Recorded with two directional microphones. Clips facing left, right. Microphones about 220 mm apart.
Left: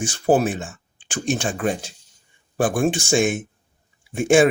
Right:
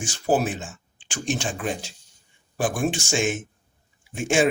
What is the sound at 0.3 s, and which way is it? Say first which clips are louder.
Speech: left 4 dB; 55° left (ahead or behind).